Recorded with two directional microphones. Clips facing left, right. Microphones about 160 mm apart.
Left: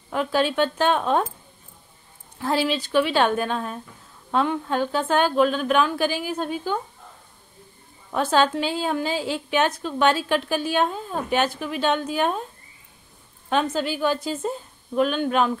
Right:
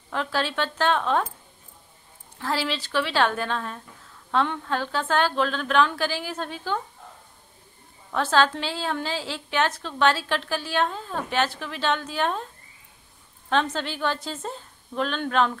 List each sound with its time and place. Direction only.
0.1 s a woman's voice: 15° left (ahead or behind)
2.4 s a woman's voice: 20° left (ahead or behind)
8.1 s a woman's voice: 15° left (ahead or behind)
13.5 s a woman's voice: 10° left (ahead or behind)